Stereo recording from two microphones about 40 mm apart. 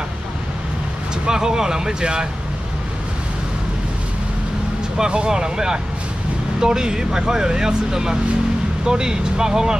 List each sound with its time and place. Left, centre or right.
1.2 s speech: centre
4.9 s speech: right